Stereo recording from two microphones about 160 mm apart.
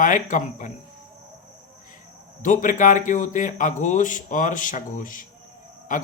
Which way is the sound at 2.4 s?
55° left (ahead or behind).